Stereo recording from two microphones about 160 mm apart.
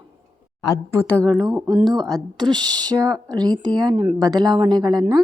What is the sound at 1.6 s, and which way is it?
Speech, 25° right (ahead or behind).